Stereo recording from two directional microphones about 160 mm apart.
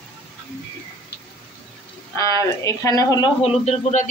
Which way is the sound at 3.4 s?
40° left (ahead or behind).